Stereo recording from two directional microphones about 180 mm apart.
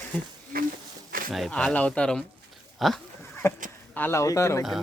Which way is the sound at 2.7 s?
Centre (ahead or behind).